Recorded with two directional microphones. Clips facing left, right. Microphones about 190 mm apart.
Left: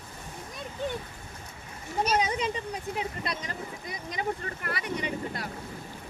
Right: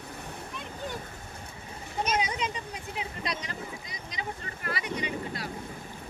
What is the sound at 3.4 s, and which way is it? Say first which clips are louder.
Speech: left 2 dB; 50° left (ahead or behind).